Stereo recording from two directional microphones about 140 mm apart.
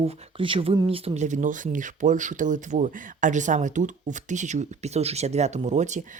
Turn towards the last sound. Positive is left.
turn(degrees=-55)  # may be behind; listen again after turning